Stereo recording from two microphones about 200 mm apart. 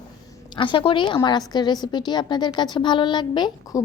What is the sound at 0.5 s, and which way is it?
A woman's voice, 25° left (ahead or behind).